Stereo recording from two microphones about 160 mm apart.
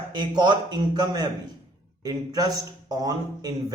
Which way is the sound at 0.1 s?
25° right (ahead or behind).